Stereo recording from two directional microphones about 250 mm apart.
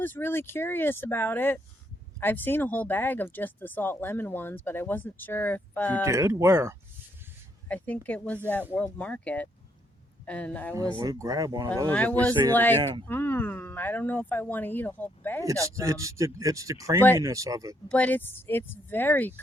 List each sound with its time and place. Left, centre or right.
0.0 s speech: centre
6.1 s speech: centre
7.7 s speech: centre
10.8 s speech: centre
11.9 s speech: centre
12.1 s speech: centre
12.5 s speech: centre
15.4 s speech: centre
17.8 s speech: centre